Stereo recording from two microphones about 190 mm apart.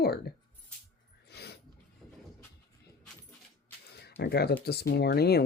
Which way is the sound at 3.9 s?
60° left (ahead or behind).